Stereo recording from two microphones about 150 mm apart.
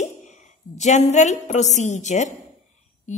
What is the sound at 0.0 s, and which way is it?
A woman's voice, 50° left (ahead or behind).